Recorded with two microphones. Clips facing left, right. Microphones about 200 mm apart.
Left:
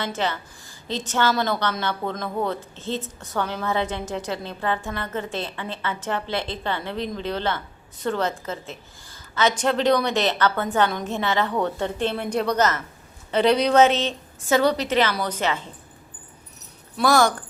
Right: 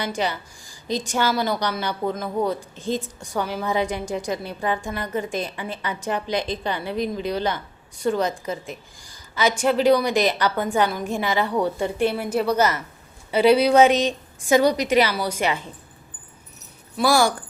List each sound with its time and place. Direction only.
0.0 s a woman's voice: 15° right (ahead or behind)
17.0 s a woman's voice: 10° right (ahead or behind)